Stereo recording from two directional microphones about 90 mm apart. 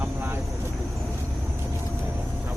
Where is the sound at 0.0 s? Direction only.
25° right (ahead or behind).